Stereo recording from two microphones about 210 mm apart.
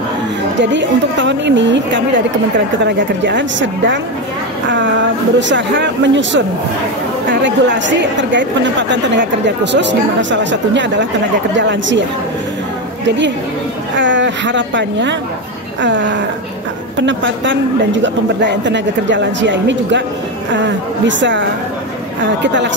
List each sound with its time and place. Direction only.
0.6 s a woman's voice: 60° right (ahead or behind)
3.3 s a woman's voice: 55° right (ahead or behind)
5.5 s a woman's voice: 60° right (ahead or behind)
13.9 s a woman's voice: 60° right (ahead or behind)